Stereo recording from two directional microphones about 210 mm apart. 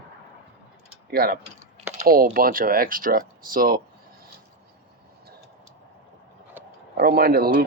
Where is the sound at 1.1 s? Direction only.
45° right (ahead or behind).